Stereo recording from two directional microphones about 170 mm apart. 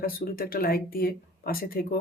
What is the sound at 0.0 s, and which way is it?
Speech, 60° left (ahead or behind).